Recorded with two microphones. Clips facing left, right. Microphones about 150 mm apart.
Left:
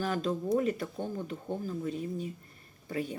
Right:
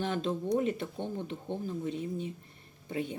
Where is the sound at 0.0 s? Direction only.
25° right (ahead or behind).